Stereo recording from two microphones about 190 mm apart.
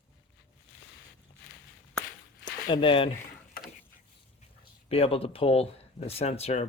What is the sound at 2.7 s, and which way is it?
Speech, 25° left (ahead or behind).